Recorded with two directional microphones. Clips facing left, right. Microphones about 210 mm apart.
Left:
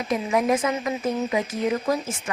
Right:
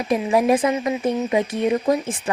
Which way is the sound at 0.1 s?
30° right (ahead or behind).